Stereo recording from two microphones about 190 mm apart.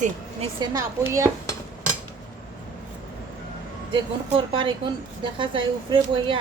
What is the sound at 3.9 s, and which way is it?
Speech, 25° right (ahead or behind).